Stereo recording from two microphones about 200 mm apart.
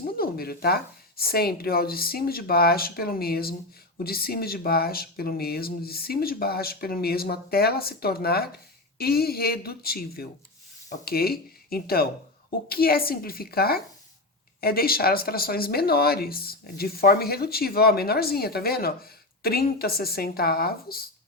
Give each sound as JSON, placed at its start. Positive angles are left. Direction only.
{"t": 0.2, "sound": "speech", "side_deg": 50}